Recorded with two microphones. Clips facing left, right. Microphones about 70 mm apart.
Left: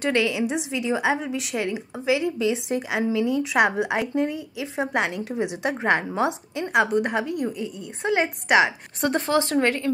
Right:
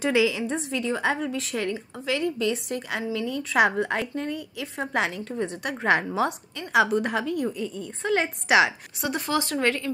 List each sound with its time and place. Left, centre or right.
0.0 s a woman's voice: centre
0.7 s a woman's voice: centre
4.9 s a woman's voice: centre
5.2 s speech: centre
5.9 s a woman's voice: centre
9.2 s speech: left